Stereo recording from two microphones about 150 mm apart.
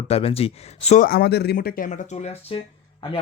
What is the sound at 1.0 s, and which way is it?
A man's voice, 85° left.